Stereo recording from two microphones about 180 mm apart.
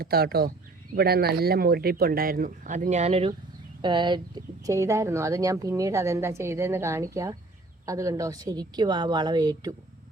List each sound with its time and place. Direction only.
0.0 s a woman's voice: 60° right (ahead or behind); by 9.7 s 20° right (ahead or behind)